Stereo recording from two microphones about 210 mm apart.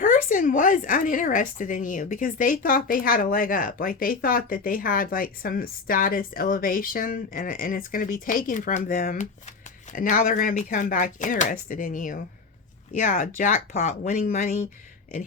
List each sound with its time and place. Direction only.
0.0 s a woman's voice: 40° left (ahead or behind)